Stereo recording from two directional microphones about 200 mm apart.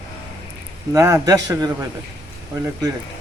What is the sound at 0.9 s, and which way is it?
Speech, 15° right (ahead or behind).